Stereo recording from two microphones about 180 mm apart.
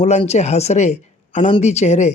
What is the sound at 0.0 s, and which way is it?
Speech, 35° left (ahead or behind).